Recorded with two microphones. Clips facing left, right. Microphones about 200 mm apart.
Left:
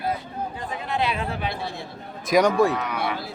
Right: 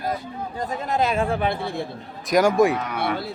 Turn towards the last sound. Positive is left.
turn(degrees=-55)  # may be behind; listen again after turning